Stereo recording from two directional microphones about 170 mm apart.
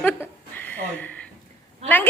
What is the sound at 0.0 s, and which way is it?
Chuckle, 10° left (ahead or behind).